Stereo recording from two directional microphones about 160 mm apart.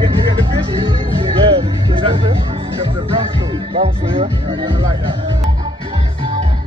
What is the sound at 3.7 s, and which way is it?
Speech, 35° right (ahead or behind).